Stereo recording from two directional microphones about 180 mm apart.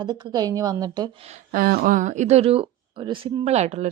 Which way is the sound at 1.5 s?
55° right (ahead or behind).